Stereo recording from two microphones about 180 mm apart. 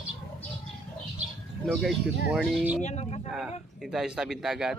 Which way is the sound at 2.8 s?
40° left (ahead or behind).